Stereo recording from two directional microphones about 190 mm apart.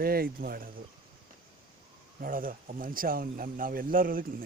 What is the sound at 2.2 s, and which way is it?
Speech, 45° right (ahead or behind).